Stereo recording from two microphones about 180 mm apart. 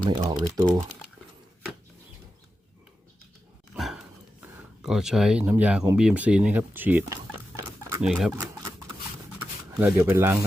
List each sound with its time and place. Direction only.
0.1 s speech: 25° right (ahead or behind)
3.8 s dog: centre (ahead or behind)
4.8 s speech: 5° right (ahead or behind)
8.0 s speech: centre (ahead or behind)
9.7 s speech: 10° right (ahead or behind)